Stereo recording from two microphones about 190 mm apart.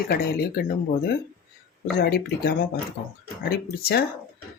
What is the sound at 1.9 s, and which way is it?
Speech, 55° left (ahead or behind).